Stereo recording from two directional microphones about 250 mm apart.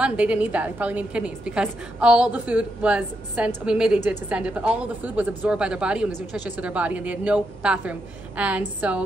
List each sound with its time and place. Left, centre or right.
0.0 s a woman's voice: centre